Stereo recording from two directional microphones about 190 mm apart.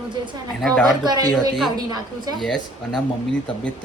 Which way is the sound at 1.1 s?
20° right (ahead or behind).